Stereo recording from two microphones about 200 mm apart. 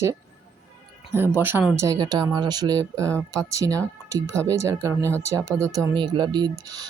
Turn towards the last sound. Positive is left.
turn(degrees=-20)  # may be behind; listen again after turning